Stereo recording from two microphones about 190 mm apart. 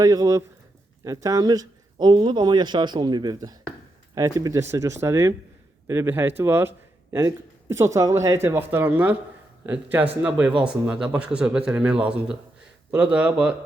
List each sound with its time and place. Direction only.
0.0 s a man's voice: 20° right (ahead or behind)